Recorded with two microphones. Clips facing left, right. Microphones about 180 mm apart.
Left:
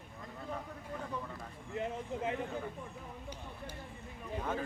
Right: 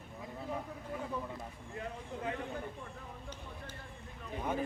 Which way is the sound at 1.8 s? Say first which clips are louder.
Left 5 dB; 20° left (ahead or behind).